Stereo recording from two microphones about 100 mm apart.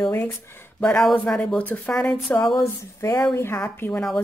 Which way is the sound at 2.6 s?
30° left (ahead or behind).